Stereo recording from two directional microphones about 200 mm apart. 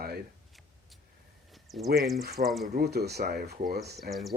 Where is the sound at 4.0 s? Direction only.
Centre (ahead or behind).